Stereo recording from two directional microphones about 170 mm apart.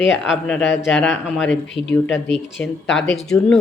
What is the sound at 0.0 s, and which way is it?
Speech, 90° left.